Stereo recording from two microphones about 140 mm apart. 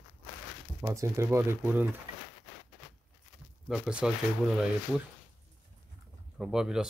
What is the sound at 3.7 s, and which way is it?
Speech, 5° right (ahead or behind).